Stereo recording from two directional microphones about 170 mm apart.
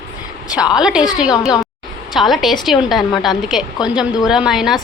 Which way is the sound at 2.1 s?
Centre (ahead or behind).